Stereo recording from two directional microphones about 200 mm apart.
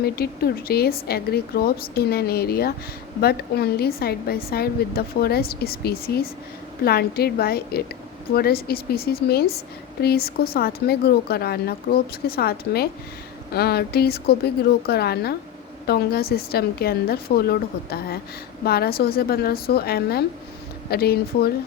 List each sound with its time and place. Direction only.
0.0 s a woman's voice: 50° left (ahead or behind)